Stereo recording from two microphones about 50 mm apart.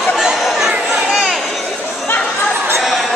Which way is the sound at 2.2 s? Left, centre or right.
Left.